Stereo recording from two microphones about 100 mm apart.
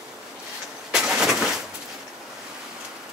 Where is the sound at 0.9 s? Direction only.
10° right (ahead or behind).